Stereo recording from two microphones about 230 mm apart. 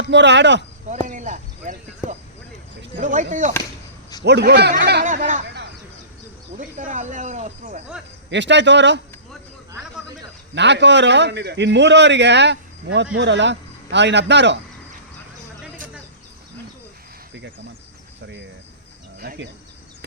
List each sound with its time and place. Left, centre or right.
0.1 s a man's voice: right
1.0 s a sound: right
3.0 s speech: right
4.2 s a man's voice: right
5.0 s speech: right
6.6 s speech: right
8.3 s a man's voice: right
10.5 s a man's voice: right
19.2 s speech: right